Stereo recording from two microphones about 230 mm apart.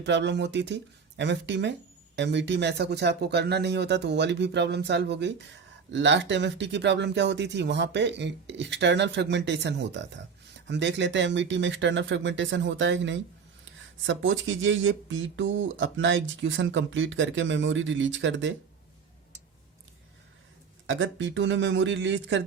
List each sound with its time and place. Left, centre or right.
0.0 s speech: right
20.8 s speech: right